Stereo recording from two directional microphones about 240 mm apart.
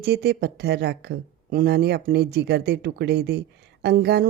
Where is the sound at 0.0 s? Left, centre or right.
Right.